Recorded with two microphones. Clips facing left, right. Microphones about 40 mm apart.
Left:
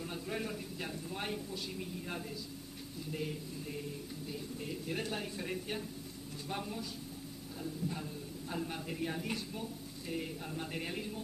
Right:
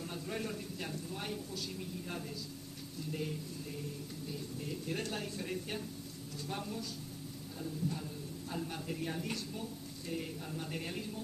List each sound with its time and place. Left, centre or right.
0.0 s a sound: centre
1.1 s speech: left
3.1 s a woman's voice: centre
7.9 s a woman's voice: centre